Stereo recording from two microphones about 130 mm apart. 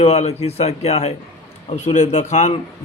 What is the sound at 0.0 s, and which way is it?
A man's voice, 55° left (ahead or behind).